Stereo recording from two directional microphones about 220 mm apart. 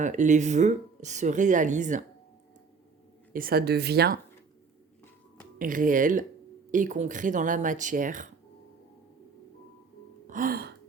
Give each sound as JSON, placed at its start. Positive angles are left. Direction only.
{"t": 0.0, "sound": "speech", "side_deg": -35}
{"t": 3.3, "sound": "speech", "side_deg": -45}
{"t": 5.5, "sound": "speech", "side_deg": -35}
{"t": 10.2, "sound": "gasp", "side_deg": -40}